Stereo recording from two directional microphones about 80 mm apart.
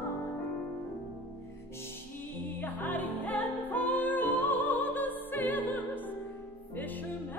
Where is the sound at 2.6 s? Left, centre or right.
Left.